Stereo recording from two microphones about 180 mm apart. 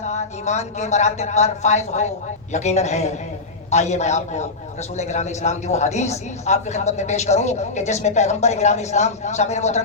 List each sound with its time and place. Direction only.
0.0 s a man's voice: 40° left (ahead or behind)